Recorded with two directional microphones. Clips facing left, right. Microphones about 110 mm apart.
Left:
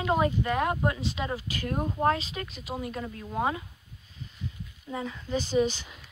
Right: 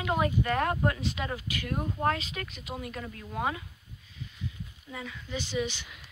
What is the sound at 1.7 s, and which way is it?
Speech, 20° left (ahead or behind).